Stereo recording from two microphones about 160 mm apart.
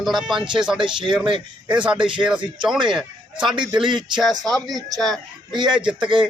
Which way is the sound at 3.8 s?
30° right (ahead or behind).